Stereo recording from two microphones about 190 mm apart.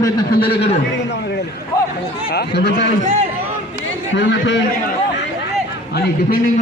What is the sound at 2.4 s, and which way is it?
Speech, 60° left (ahead or behind).